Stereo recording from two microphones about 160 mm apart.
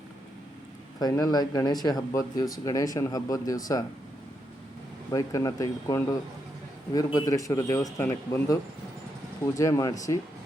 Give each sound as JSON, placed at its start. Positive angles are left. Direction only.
{"t": 0.9, "sound": "speech", "side_deg": 25}
{"t": 5.1, "sound": "speech", "side_deg": 20}
{"t": 9.6, "sound": "speech", "side_deg": 20}